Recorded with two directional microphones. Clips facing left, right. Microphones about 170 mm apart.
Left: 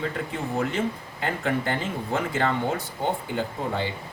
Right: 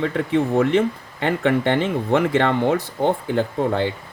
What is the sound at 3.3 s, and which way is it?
Speech, 60° right (ahead or behind).